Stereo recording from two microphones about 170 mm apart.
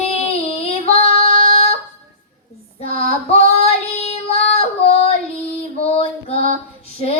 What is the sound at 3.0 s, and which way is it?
Female singing, 40° left (ahead or behind).